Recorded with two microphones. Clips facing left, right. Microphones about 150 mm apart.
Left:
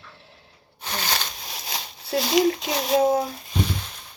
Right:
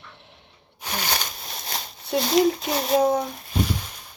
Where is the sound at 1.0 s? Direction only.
15° right (ahead or behind).